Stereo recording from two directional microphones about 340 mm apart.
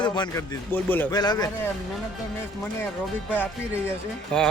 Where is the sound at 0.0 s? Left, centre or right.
Centre.